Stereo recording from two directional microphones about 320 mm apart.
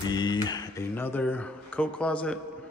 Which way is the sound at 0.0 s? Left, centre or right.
Centre.